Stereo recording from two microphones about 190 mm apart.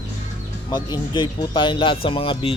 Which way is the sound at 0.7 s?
20° left (ahead or behind).